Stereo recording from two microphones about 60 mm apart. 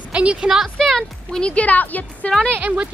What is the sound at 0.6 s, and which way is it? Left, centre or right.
Speech, centre.